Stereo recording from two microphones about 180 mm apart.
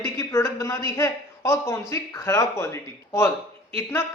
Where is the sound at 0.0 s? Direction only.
15° left (ahead or behind).